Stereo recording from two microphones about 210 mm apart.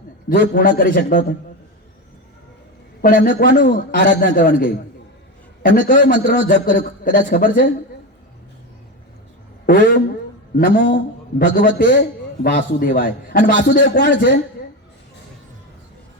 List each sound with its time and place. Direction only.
0.3 s a man's voice: 45° left (ahead or behind)
3.0 s a man's voice: 40° left (ahead or behind)
9.6 s a man's voice: 45° left (ahead or behind)